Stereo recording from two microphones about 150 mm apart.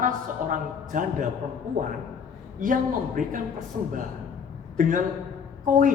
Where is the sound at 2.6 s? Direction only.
65° right (ahead or behind).